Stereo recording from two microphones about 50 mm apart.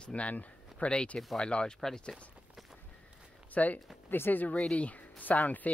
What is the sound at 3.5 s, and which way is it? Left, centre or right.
Speech, left.